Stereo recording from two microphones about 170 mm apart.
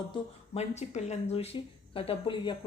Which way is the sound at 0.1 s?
40° left (ahead or behind).